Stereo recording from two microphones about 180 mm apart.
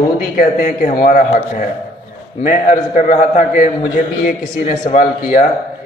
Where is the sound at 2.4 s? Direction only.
45° left (ahead or behind).